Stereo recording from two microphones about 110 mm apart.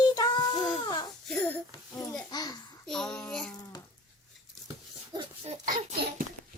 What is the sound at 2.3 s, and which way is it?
Speech, 40° left (ahead or behind).